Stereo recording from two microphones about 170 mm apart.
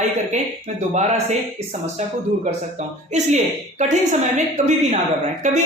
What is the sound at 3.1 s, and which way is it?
A woman's voice, 45° right (ahead or behind).